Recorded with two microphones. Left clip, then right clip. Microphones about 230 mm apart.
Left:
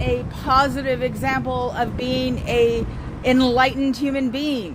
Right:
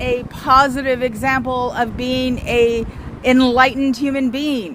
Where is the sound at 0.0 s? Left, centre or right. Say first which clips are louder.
Right 4 dB; right.